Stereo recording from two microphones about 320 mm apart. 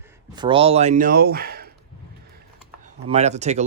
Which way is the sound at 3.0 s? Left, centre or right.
Centre.